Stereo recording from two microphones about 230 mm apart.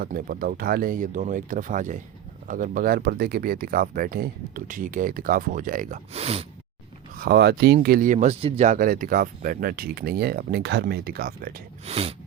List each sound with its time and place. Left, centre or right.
0.0 s speech: right
7.2 s speech: right
11.9 s a sound: right